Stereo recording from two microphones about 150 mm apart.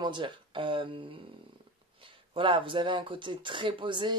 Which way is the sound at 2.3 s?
35° right (ahead or behind).